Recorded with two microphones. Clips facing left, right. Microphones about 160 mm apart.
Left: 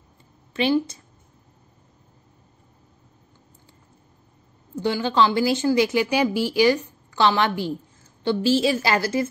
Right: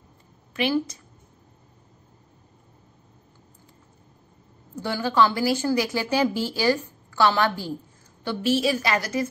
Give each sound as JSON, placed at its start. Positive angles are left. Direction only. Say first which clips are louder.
{"t": 0.5, "sound": "a woman's voice", "louder": "left 3 dB", "side_deg": 30}
{"t": 4.7, "sound": "speech", "louder": "left 1 dB", "side_deg": 20}